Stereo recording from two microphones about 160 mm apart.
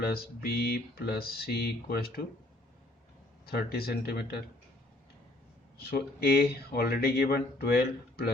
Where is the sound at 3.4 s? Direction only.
75° left (ahead or behind).